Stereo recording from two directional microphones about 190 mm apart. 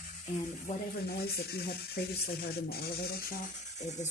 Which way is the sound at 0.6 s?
55° left (ahead or behind).